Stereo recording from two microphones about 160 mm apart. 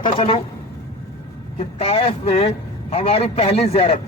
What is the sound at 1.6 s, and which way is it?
A man's voice, 35° left (ahead or behind).